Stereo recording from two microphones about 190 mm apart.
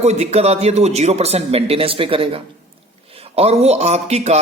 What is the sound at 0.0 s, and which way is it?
Speech, 35° right (ahead or behind).